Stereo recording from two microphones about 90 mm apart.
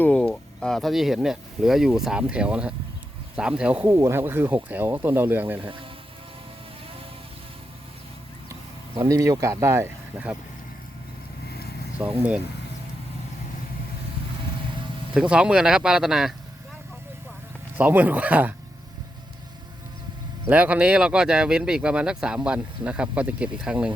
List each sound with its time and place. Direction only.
0.0 s speech: 15° left (ahead or behind); by 3.8 s 10° right (ahead or behind)
3.8 s speech: 30° right (ahead or behind)
5.5 s speech: 75° right (ahead or behind)
9.0 s speech: 40° right (ahead or behind)
11.9 s speech: 15° right (ahead or behind)
15.1 s speech: 10° right (ahead or behind)
17.7 s speech: 20° right (ahead or behind)
20.5 s speech: 15° right (ahead or behind)